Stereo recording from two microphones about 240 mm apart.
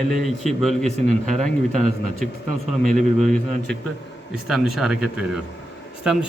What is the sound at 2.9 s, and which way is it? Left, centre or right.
A man's voice, centre.